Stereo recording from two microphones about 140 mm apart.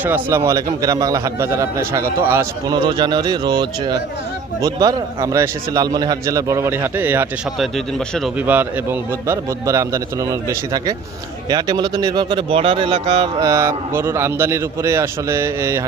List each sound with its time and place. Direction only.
0.0 s a man's voice: 15° right (ahead or behind)
2.7 s a man's voice: 35° right (ahead or behind); by 7.3 s 15° right (ahead or behind)
7.6 s speech: centre (ahead or behind)
8.4 s a man's voice: 10° right (ahead or behind); by 13.5 s 35° right (ahead or behind)
13.5 s a man's voice: 20° right (ahead or behind)